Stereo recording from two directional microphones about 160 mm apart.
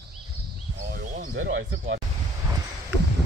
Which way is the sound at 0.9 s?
60° right (ahead or behind).